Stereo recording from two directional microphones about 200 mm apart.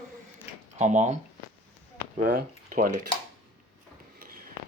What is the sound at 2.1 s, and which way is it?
Speech, 40° right (ahead or behind).